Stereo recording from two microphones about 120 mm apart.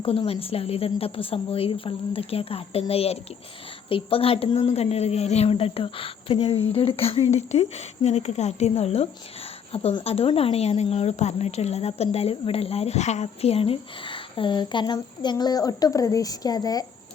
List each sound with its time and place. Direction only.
0.3 s a woman's voice: 55° left (ahead or behind); by 16.8 s 35° left (ahead or behind)